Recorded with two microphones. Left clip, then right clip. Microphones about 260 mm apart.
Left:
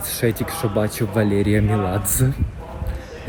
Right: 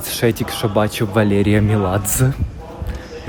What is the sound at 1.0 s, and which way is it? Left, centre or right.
Speech, right.